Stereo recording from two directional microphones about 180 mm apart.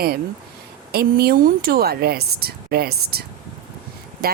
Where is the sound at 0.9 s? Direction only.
60° right (ahead or behind).